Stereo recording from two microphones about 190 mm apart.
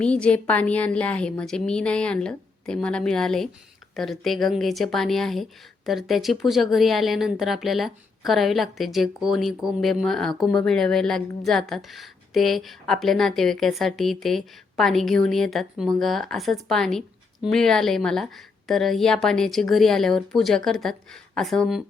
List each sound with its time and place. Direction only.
0.0 s speech: 5° left (ahead or behind)